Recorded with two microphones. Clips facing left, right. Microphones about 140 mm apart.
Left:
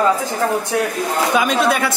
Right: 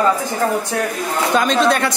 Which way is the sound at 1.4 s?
5° left (ahead or behind).